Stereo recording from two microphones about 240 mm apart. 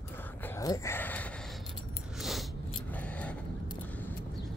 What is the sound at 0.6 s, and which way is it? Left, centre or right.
Speech, centre.